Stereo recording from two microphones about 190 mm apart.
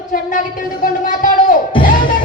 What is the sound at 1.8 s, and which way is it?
Music, 45° left (ahead or behind).